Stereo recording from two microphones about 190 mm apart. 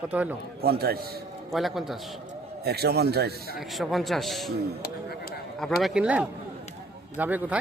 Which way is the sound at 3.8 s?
Centre (ahead or behind).